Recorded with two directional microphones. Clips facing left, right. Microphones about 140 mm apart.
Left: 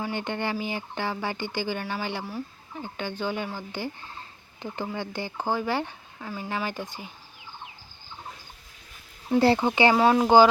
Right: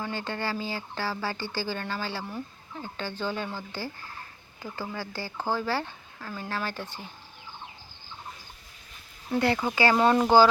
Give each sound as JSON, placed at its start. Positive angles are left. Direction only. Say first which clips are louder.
{"t": 0.0, "sound": "speech", "louder": "left 2 dB", "side_deg": 20}
{"t": 9.4, "sound": "speech", "louder": "left 4 dB", "side_deg": 30}
{"t": 9.9, "sound": "speech", "louder": "right 1 dB", "side_deg": 5}
{"t": 10.2, "sound": "speech", "louder": "left 2 dB", "side_deg": 15}